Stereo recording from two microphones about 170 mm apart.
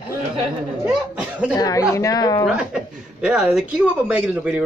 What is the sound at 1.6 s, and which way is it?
Speech, 20° left (ahead or behind).